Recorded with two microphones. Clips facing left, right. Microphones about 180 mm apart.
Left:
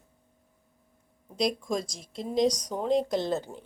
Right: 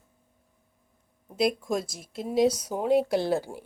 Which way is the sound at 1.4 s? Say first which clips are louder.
Right 2 dB; 5° right (ahead or behind).